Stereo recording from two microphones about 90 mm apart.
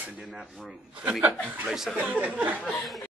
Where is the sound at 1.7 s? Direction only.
5° right (ahead or behind).